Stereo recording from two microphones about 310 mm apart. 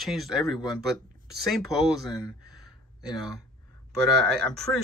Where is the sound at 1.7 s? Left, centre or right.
Centre.